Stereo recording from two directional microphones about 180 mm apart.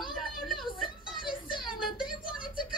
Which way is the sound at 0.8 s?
25° left (ahead or behind).